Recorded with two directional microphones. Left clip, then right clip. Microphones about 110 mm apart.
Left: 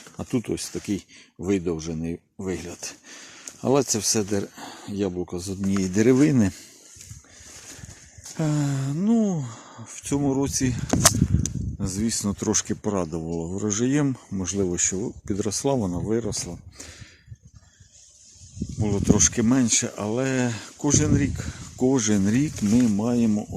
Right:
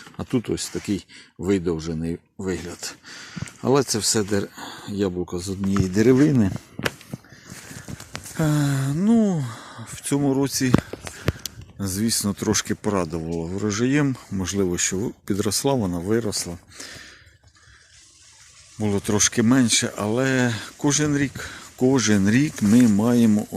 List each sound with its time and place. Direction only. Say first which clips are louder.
0.2 s speech: right 2 dB; 15° left (ahead or behind)
8.4 s speech: right 3 dB; centre (ahead or behind)
11.8 s speech: right 3 dB; 5° left (ahead or behind); by 14.2 s 25° left (ahead or behind)
14.3 s speech: right 2 dB; 10° left (ahead or behind)
16.7 s a sound: right 5 dB; 15° left (ahead or behind)
18.8 s speech: even; 10° left (ahead or behind)
23.0 s speech: right 4 dB; 5° right (ahead or behind)